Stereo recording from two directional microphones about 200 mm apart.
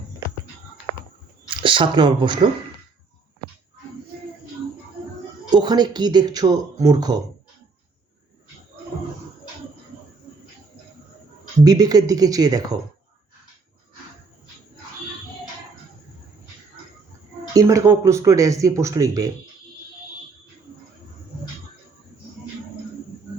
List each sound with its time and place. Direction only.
1.5 s speech: 25° right (ahead or behind)
5.5 s speech: 20° right (ahead or behind)
11.6 s speech: 20° right (ahead or behind)
17.5 s speech: 15° right (ahead or behind)